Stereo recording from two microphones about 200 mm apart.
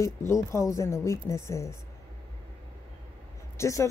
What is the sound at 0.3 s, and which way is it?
A woman's voice, 15° left (ahead or behind).